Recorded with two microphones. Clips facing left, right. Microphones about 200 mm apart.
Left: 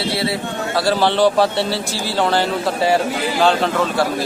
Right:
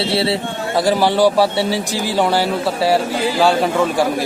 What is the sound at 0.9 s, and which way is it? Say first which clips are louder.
A man's voice: right 1 dB; 10° right (ahead or behind).